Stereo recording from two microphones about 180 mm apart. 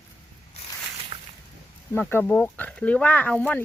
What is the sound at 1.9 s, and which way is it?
Speech, 10° left (ahead or behind).